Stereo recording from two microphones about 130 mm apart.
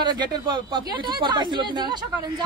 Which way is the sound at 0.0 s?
35° right (ahead or behind).